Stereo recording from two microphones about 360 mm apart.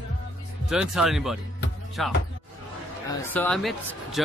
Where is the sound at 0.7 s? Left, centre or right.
Centre.